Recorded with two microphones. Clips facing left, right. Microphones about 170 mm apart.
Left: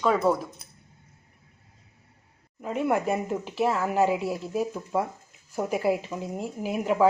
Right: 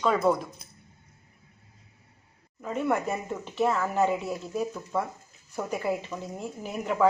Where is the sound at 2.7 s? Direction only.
10° left (ahead or behind).